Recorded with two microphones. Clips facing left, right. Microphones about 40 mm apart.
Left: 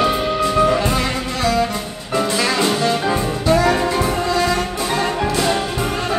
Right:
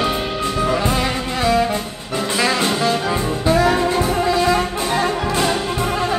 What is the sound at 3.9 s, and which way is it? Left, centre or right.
Music, centre.